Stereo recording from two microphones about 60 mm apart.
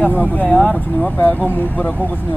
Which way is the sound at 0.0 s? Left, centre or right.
Left.